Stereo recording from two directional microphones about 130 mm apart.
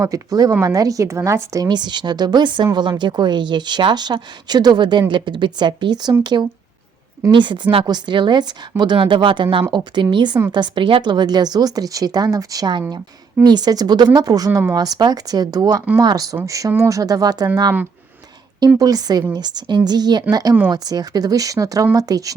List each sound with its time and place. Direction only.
0.0 s a woman's voice: 25° right (ahead or behind)
7.3 s a woman's voice: 35° right (ahead or behind)
18.8 s a woman's voice: 30° right (ahead or behind)